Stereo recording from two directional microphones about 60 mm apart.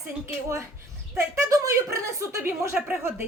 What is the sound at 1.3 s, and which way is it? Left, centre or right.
Speech, right.